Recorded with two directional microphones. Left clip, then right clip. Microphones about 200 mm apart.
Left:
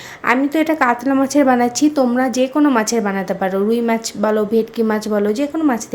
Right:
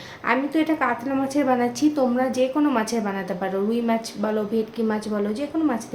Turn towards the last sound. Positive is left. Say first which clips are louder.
# left 7 dB
turn(degrees=45)  # may be behind; listen again after turning